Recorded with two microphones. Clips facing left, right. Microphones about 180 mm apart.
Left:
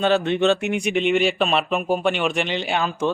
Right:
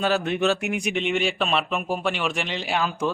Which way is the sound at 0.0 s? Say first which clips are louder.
Left 4 dB; centre (ahead or behind).